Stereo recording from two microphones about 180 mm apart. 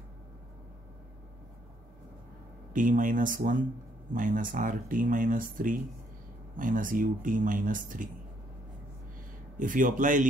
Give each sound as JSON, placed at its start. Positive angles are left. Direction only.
{"t": 2.7, "sound": "speech", "side_deg": -45}
{"t": 9.6, "sound": "speech", "side_deg": -45}